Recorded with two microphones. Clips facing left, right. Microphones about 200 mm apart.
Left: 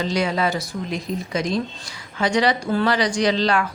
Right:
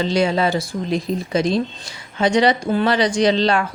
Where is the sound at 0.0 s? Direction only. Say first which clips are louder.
Right 4 dB; 30° right (ahead or behind).